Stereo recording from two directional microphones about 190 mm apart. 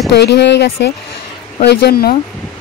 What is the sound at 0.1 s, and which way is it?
Speech, 65° left (ahead or behind).